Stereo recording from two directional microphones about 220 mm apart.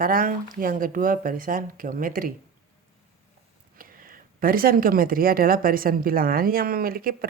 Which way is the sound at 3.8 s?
40° right (ahead or behind).